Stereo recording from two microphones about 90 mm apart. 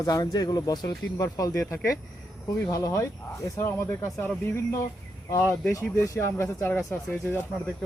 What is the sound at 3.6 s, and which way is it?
Speech, 25° left (ahead or behind).